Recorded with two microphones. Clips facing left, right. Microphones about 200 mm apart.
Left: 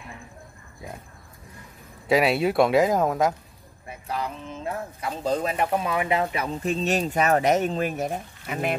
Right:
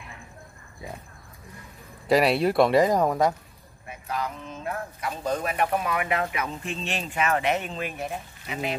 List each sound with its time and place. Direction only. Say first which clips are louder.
2.0 s speech: even; centre (ahead or behind)
4.1 s speech: left 1 dB; 30° left (ahead or behind); by 8.7 s 50° left (ahead or behind)